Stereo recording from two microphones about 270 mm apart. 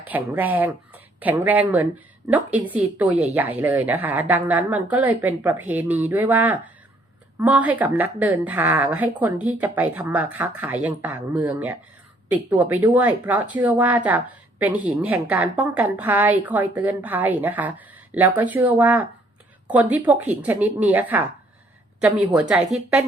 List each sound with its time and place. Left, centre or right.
0.1 s a woman's voice: centre